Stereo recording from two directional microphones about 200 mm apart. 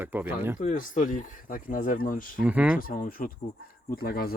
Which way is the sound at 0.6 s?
40° left (ahead or behind).